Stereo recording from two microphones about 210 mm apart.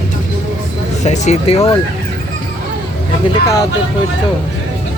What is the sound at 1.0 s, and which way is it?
Speech, 35° left (ahead or behind).